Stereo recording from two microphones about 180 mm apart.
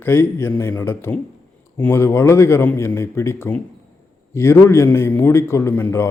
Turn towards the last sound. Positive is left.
turn(degrees=10)  # may be behind; listen again after turning